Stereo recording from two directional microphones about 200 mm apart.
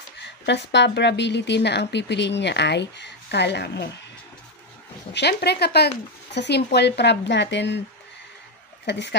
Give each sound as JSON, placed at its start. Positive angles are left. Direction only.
{"t": 0.2, "sound": "speech", "side_deg": 60}
{"t": 5.1, "sound": "speech", "side_deg": 55}